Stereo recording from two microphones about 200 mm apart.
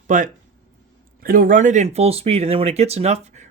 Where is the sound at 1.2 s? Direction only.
45° right (ahead or behind).